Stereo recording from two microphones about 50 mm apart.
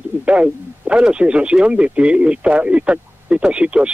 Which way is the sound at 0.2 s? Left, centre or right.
Right.